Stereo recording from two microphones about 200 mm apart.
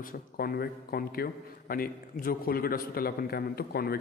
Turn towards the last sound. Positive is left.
turn(degrees=50)  # may be behind; listen again after turning